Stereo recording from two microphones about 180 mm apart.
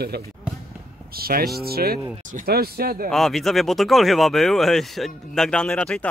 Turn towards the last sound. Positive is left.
turn(degrees=5)  # may be behind; listen again after turning